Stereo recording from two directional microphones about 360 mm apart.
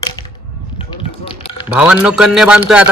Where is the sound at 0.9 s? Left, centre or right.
Centre.